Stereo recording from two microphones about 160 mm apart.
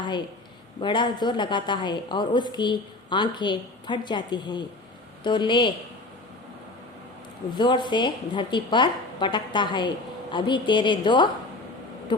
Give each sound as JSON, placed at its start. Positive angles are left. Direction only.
{"t": 0.8, "sound": "a woman's voice", "side_deg": 30}
{"t": 7.5, "sound": "a woman's voice", "side_deg": 30}